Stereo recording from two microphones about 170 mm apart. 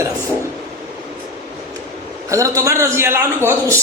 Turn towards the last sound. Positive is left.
turn(degrees=-15)  # may be behind; listen again after turning